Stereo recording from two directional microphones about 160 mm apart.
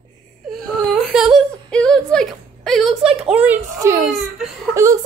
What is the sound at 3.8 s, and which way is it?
Whimper, 20° right (ahead or behind).